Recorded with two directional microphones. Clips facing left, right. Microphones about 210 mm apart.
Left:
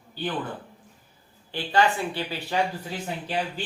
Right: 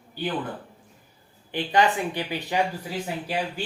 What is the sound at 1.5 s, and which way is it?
Speech, 15° right (ahead or behind).